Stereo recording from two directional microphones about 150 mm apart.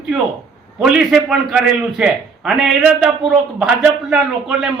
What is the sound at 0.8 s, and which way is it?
A man's voice, 5° right (ahead or behind).